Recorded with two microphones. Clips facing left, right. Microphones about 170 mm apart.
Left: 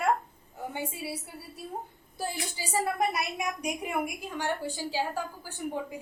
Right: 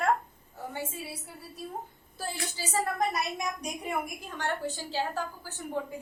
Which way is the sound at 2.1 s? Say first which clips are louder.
Left 1 dB; 15° left (ahead or behind).